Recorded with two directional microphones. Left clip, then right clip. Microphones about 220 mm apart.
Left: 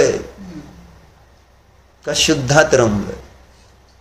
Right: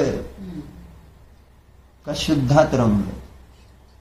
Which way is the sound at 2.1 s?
30° left (ahead or behind).